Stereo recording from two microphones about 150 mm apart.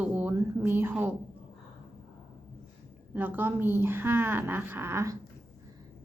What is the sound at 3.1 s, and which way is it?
A woman's voice, 15° right (ahead or behind).